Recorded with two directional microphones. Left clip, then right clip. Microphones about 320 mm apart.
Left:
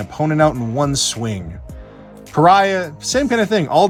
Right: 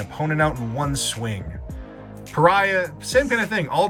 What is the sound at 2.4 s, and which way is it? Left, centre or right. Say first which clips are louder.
Speech: left 5 dB; centre.